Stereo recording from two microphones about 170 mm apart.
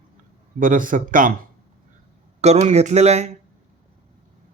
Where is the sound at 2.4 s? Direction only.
40° right (ahead or behind).